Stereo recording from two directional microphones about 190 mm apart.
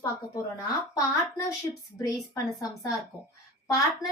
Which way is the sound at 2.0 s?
20° left (ahead or behind).